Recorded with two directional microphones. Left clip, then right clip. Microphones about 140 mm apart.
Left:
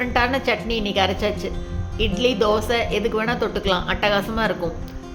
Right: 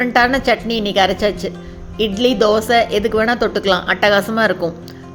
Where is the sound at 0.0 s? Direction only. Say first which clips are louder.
Right 6 dB; 45° right (ahead or behind).